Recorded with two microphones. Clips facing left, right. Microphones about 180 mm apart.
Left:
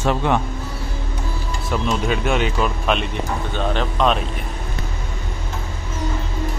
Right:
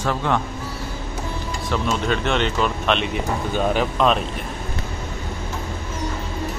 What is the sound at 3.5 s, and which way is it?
Speech, 10° right (ahead or behind).